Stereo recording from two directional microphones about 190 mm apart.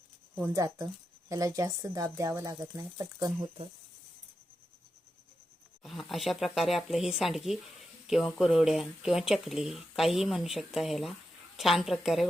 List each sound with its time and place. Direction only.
0.3 s speech: 15° right (ahead or behind)
5.8 s speech: centre (ahead or behind)